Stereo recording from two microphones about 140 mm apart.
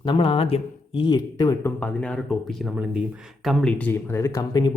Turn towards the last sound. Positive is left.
turn(degrees=25)  # may be behind; listen again after turning